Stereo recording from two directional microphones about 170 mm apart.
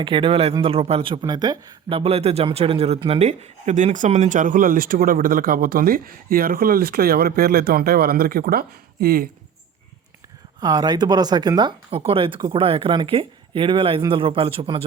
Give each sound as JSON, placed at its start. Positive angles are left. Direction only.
{"t": 0.0, "sound": "speech", "side_deg": -30}
{"t": 10.6, "sound": "speech", "side_deg": -25}